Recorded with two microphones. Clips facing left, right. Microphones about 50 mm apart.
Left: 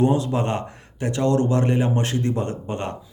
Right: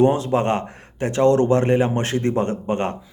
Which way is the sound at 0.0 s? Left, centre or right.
Right.